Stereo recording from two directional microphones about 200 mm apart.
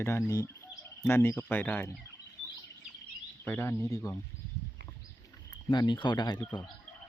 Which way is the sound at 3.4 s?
10° left (ahead or behind).